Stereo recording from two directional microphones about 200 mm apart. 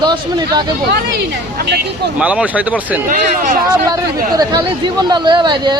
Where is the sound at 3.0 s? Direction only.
40° right (ahead or behind).